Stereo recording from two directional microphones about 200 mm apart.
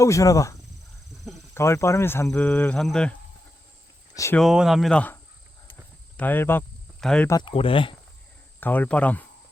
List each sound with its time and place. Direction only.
0.0 s speech: 15° left (ahead or behind)
1.5 s speech: 15° left (ahead or behind)
4.1 s speech: 15° left (ahead or behind)
4.4 s speech: centre (ahead or behind)
7.3 s speech: 20° left (ahead or behind)
8.6 s speech: 10° left (ahead or behind)